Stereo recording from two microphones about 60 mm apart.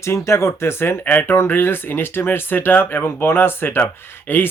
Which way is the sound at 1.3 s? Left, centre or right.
Left.